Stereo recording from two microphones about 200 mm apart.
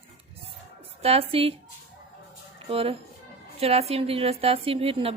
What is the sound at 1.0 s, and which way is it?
Speech, 30° right (ahead or behind).